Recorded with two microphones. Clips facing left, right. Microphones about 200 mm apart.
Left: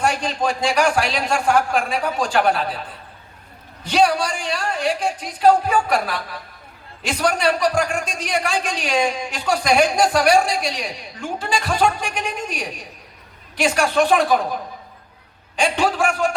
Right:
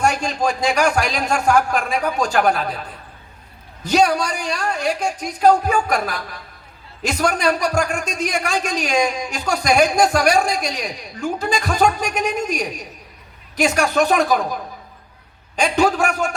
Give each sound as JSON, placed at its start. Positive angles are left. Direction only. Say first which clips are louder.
{"t": 0.0, "sound": "a man's voice", "louder": "right 2 dB", "side_deg": -45}
{"t": 3.8, "sound": "a man's voice", "louder": "right 1 dB", "side_deg": -45}
{"t": 15.5, "sound": "a man's voice", "louder": "right 2 dB", "side_deg": -45}